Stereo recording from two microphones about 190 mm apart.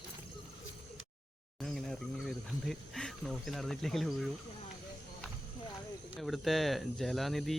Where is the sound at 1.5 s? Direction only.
Centre (ahead or behind).